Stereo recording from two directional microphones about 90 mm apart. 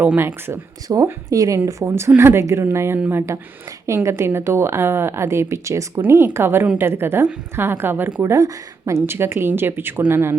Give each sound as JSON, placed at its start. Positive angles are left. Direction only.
{"t": 0.2, "sound": "a woman's voice", "side_deg": -25}
{"t": 1.0, "sound": "speech", "side_deg": -40}
{"t": 1.8, "sound": "a woman's voice", "side_deg": -25}
{"t": 8.2, "sound": "a woman's voice", "side_deg": -35}